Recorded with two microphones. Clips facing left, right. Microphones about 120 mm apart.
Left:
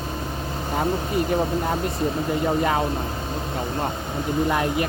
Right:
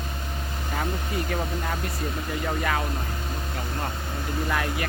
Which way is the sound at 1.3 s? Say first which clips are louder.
Left 7 dB; 25° left (ahead or behind).